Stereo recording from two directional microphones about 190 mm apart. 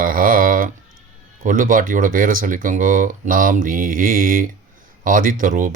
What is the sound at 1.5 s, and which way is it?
Speech, 45° right (ahead or behind).